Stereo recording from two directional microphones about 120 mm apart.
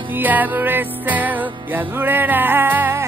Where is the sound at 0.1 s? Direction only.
15° right (ahead or behind).